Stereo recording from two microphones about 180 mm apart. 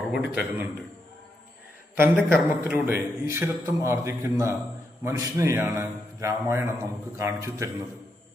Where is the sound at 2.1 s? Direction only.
10° right (ahead or behind).